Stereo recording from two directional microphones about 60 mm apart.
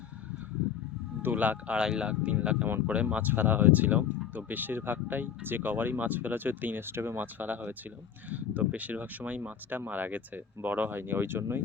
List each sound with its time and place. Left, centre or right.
1.2 s speech: right
1.8 s speech: centre; by 7.2 s right
7.2 s speech: right